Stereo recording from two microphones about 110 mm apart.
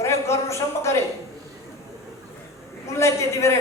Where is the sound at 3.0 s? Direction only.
25° left (ahead or behind).